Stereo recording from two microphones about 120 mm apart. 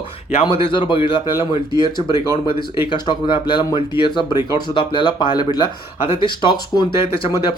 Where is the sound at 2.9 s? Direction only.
40° left (ahead or behind).